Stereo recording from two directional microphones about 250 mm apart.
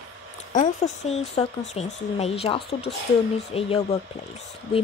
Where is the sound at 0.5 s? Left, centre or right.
Left.